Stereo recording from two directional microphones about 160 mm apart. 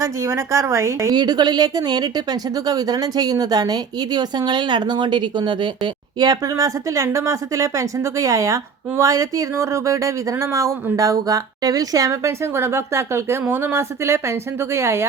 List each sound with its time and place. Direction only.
0.0 s a woman's voice: 20° right (ahead or behind)